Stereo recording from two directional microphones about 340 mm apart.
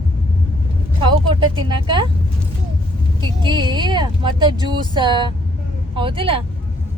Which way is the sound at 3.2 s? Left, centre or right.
Centre.